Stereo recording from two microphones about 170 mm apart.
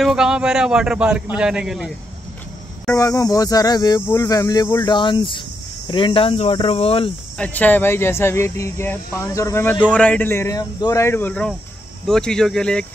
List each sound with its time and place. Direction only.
0.0 s a man's voice: 5° right (ahead or behind)
2.9 s speech: 15° left (ahead or behind); by 7.1 s 35° left (ahead or behind)
7.3 s a man's voice: 10° left (ahead or behind)